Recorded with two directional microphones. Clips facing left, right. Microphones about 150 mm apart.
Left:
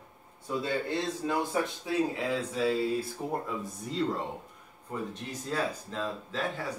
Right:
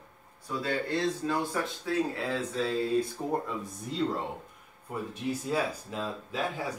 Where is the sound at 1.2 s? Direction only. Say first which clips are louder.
Left 1 dB; 15° left (ahead or behind).